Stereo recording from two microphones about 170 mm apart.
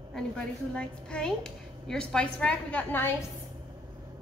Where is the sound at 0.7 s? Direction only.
5° left (ahead or behind).